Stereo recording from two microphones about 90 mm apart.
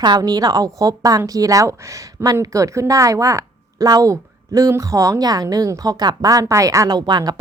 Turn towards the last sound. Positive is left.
turn(degrees=-50)  # may be behind; listen again after turning